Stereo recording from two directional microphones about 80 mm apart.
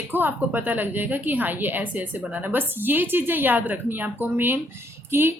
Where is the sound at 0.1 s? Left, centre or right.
Right.